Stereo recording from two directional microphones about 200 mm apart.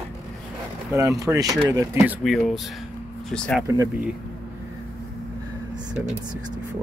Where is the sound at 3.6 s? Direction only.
15° right (ahead or behind).